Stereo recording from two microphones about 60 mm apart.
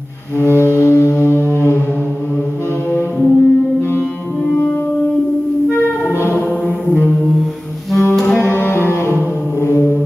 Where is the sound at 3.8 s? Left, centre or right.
Left.